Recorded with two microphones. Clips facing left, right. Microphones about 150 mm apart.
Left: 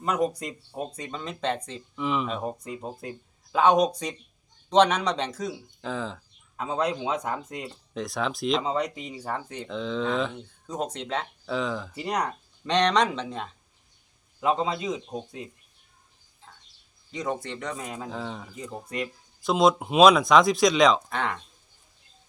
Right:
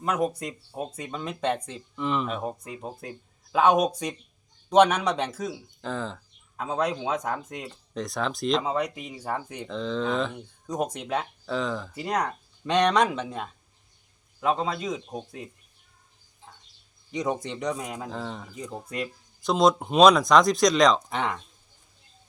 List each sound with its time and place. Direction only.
0.2 s a man's voice: 5° right (ahead or behind)
2.0 s a man's voice: centre (ahead or behind)
10.3 s a man's voice: 10° right (ahead or behind)
11.4 s a man's voice: centre (ahead or behind)
17.1 s a man's voice: 15° right (ahead or behind)
18.1 s speech: centre (ahead or behind)
21.1 s a man's voice: 15° right (ahead or behind)